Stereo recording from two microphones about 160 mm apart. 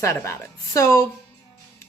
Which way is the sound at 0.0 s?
20° left (ahead or behind).